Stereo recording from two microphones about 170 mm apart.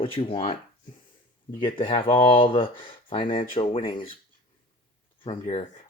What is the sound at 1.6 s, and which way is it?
Speech, 30° left (ahead or behind).